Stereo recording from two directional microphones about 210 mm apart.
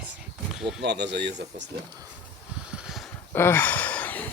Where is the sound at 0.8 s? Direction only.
55° right (ahead or behind).